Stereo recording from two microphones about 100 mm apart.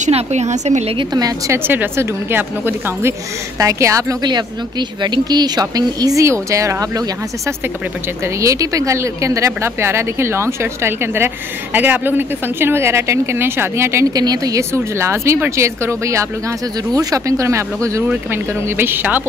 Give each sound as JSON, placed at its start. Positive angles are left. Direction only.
{"t": 0.1, "sound": "a woman's voice", "side_deg": -90}
{"t": 0.9, "sound": "speech", "side_deg": -40}
{"t": 1.5, "sound": "a woman's voice", "side_deg": -20}
{"t": 4.2, "sound": "a woman's voice", "side_deg": -45}
{"t": 14.1, "sound": "a woman's voice", "side_deg": -40}
{"t": 18.0, "sound": "a woman's voice", "side_deg": -20}